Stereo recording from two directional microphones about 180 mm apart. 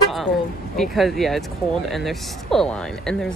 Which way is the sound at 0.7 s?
Centre (ahead or behind).